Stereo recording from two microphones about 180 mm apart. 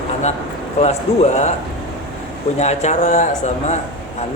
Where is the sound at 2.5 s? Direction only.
40° left (ahead or behind).